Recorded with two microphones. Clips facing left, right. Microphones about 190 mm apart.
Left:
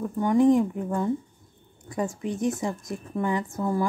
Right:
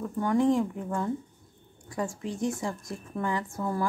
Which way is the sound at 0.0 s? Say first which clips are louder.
Left 4 dB; 15° left (ahead or behind).